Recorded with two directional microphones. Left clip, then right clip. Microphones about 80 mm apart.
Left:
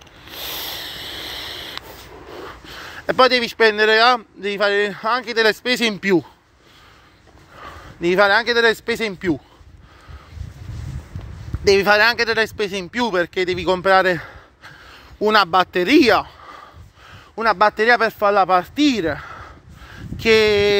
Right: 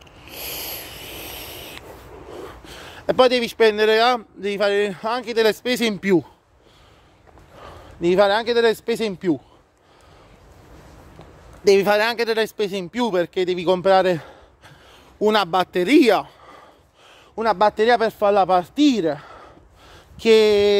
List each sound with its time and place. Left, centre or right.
0.4 s rub: right
2.2 s a sound: right
2.9 s speech: right
5.4 s a man's voice: centre
7.5 s speech: right
11.6 s a man's voice: right
13.8 s a sound: right
17.1 s a man's voice: right
18.6 s a sound: right